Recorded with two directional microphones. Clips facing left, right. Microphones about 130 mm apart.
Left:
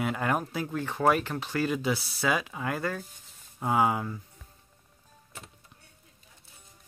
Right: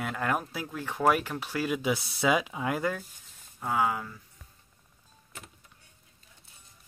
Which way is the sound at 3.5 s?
25° left (ahead or behind).